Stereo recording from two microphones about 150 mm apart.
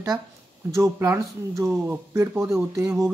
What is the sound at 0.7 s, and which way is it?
Speech, 20° right (ahead or behind).